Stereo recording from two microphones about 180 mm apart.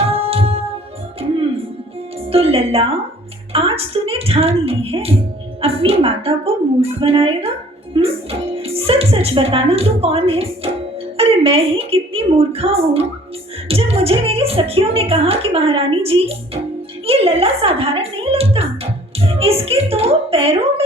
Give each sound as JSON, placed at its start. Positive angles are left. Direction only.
{"t": 0.0, "sound": "music", "side_deg": -30}
{"t": 2.3, "sound": "a child's voice", "side_deg": -30}